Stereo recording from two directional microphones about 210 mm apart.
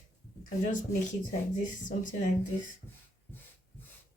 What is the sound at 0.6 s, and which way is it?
Speech, 35° left (ahead or behind).